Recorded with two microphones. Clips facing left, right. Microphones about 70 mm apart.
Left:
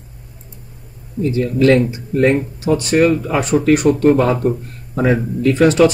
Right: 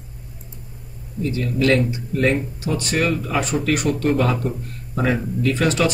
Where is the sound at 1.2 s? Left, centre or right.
Left.